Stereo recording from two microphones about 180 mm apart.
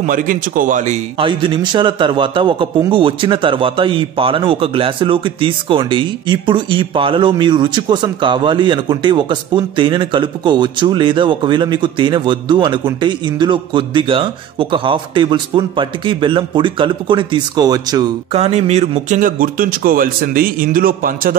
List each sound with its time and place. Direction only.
0.0 s a man's voice: 45° right (ahead or behind); by 18.4 s 20° right (ahead or behind)
18.4 s a man's voice: 35° right (ahead or behind); by 21.4 s 50° right (ahead or behind)